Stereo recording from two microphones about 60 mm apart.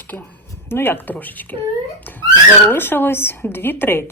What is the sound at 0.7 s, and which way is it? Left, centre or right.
Speech, left.